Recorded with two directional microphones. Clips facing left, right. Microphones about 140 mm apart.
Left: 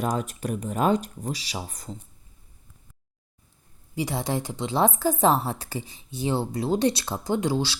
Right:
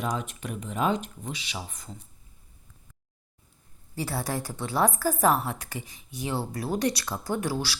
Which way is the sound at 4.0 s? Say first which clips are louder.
Left 3 dB; 20° left (ahead or behind).